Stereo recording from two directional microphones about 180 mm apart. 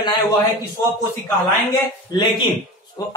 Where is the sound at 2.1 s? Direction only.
25° left (ahead or behind).